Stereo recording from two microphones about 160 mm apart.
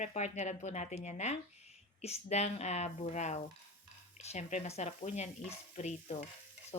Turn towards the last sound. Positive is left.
turn(degrees=45)  # may be behind; listen again after turning